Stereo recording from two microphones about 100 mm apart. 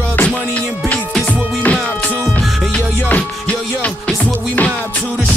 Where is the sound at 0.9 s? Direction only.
10° left (ahead or behind).